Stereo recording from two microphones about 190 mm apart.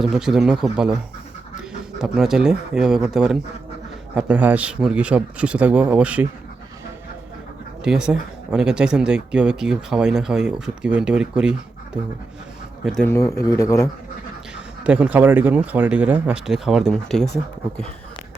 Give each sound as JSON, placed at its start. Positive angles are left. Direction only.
{"t": 0.0, "sound": "speech", "side_deg": 0}
{"t": 2.0, "sound": "speech", "side_deg": -5}
{"t": 7.9, "sound": "speech", "side_deg": -5}
{"t": 12.8, "sound": "speech", "side_deg": 5}
{"t": 14.8, "sound": "speech", "side_deg": -10}